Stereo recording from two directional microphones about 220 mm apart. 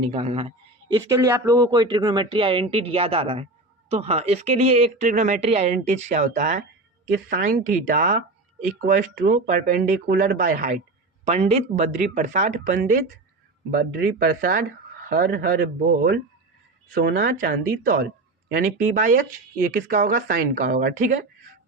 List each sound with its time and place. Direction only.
0.0 s speech: 25° right (ahead or behind)